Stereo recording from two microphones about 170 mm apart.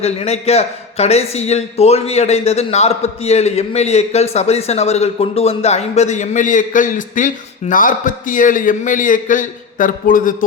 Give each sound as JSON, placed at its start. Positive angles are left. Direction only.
{"t": 0.0, "sound": "a man's voice", "side_deg": 40}